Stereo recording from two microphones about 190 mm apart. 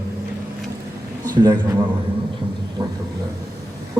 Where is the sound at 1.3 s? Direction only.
20° right (ahead or behind).